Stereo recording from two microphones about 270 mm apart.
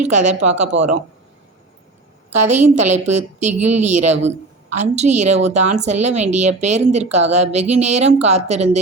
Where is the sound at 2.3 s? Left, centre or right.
Right.